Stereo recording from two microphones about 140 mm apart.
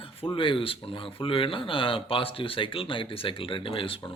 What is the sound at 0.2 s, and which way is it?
A man's voice, 40° left (ahead or behind).